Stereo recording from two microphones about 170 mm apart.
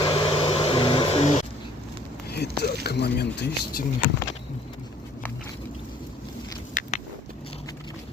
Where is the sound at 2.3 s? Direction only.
75° left (ahead or behind).